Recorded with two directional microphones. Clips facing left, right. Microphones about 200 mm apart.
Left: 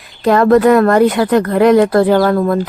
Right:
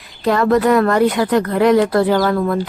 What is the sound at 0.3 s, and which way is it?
A woman's voice, 50° left (ahead or behind).